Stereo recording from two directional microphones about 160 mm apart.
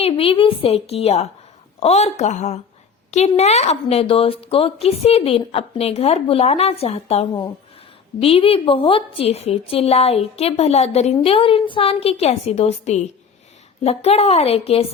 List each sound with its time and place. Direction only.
0.0 s a woman's voice: 35° left (ahead or behind)